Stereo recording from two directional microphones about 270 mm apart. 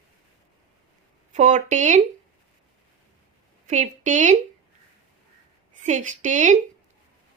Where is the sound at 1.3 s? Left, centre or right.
Right.